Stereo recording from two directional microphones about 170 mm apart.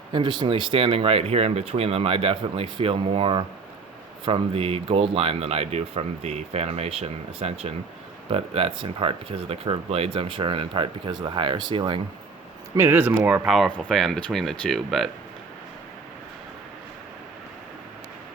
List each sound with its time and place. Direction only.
0.1 s speech: 30° right (ahead or behind)
12.7 s speech: 10° right (ahead or behind)